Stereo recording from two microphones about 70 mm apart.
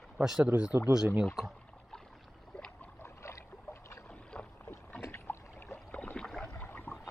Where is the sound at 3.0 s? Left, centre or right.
Left.